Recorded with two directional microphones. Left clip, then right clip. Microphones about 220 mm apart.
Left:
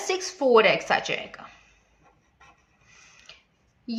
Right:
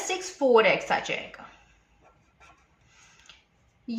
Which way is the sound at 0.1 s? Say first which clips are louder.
Left 2 dB; 40° left (ahead or behind).